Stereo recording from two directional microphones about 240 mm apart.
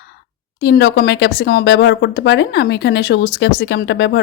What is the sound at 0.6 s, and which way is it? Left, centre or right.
Speech, left.